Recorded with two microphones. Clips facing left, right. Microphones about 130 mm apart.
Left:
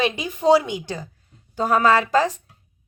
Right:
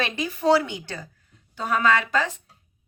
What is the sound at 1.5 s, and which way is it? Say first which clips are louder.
Speech: left 4 dB; 40° left (ahead or behind).